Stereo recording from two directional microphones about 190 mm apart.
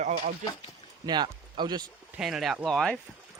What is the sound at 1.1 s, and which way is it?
Speech, 25° right (ahead or behind).